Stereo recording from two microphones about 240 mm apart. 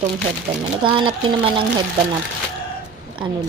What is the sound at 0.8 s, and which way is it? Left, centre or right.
Speech, right.